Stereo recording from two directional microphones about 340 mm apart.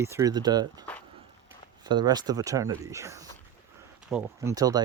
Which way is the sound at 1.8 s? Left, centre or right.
Centre.